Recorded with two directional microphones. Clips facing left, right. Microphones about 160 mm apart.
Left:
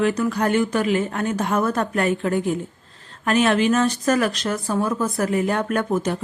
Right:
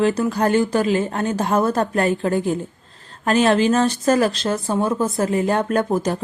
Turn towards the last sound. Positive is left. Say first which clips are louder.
# right 2 dB
turn(degrees=-35)  # may be behind; listen again after turning